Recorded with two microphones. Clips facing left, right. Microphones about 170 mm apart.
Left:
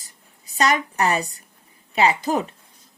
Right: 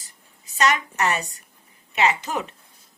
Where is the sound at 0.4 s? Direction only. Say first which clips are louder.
Left 1 dB; 35° left (ahead or behind).